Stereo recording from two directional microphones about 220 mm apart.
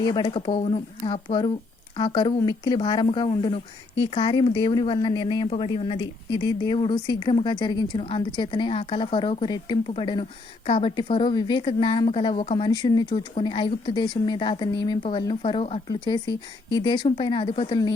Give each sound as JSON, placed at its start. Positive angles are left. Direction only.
{"t": 0.0, "sound": "speech", "side_deg": 20}